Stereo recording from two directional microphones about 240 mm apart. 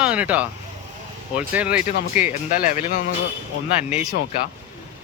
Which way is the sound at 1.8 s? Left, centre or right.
Left.